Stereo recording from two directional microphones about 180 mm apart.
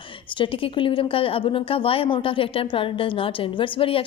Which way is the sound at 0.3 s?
30° left (ahead or behind).